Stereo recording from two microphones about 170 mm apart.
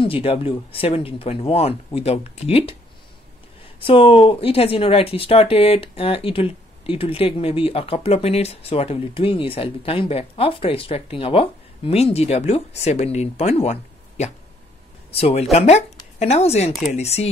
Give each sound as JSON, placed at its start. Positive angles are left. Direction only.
{"t": 0.0, "sound": "speech", "side_deg": 35}
{"t": 3.8, "sound": "speech", "side_deg": 30}